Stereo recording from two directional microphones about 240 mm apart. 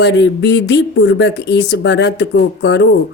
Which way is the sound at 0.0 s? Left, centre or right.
Left.